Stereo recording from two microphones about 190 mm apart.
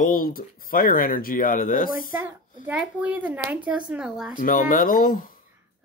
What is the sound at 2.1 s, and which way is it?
A child's voice, 10° right (ahead or behind).